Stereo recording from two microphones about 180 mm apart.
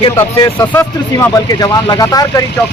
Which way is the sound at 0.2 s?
15° left (ahead or behind).